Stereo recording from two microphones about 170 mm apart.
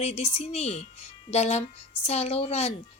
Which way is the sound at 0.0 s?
40° left (ahead or behind).